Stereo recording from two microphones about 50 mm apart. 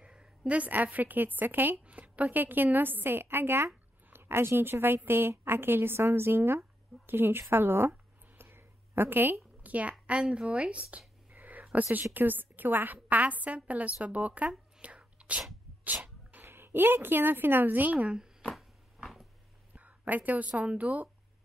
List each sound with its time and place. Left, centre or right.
0.0 s a woman's voice: centre; by 1.8 s right
1.9 s a woman's voice: right
11.3 s a sound: right
11.7 s a woman's voice: right
14.8 s whispering: right
15.8 s sneeze: right
16.4 s a woman's voice: right
18.1 s a sound: centre
19.7 s speech: right